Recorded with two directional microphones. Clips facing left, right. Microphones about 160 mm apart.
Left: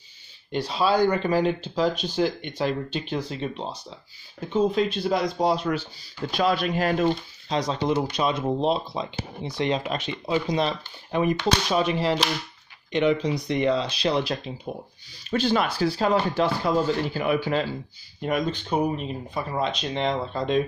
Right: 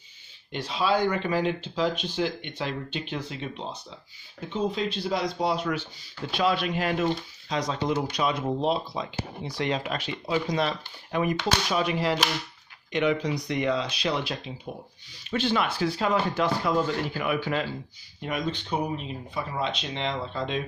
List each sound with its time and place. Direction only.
0.5 s speech: 35° left (ahead or behind)
4.6 s speech: 50° left (ahead or behind); by 17.4 s 30° left (ahead or behind)
18.2 s speech: 45° left (ahead or behind)